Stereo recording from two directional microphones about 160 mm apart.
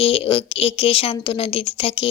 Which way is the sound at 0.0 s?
35° left (ahead or behind).